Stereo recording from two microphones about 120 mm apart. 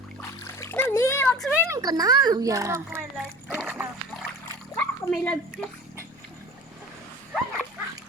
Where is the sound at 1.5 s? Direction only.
20° right (ahead or behind).